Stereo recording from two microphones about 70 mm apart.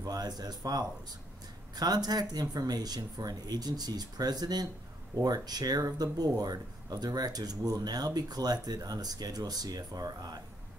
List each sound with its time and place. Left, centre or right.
0.0 s speech: right